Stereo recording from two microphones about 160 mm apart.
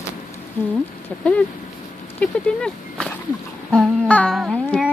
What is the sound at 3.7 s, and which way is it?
Humming, 5° left (ahead or behind).